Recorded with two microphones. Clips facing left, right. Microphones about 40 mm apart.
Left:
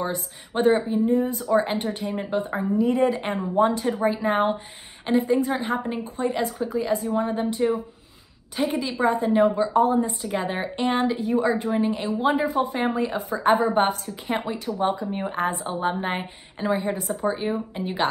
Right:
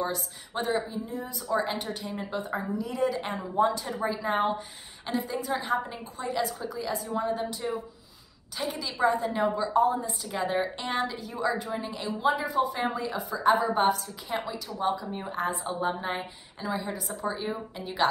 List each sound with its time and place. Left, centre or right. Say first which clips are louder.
0.6 s a woman's voice: left 9 dB; left
1.5 s a woman's voice: left 5 dB; left
9.8 s a woman's voice: left 3 dB; left